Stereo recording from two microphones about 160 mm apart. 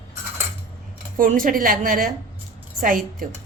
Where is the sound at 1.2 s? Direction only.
60° right (ahead or behind).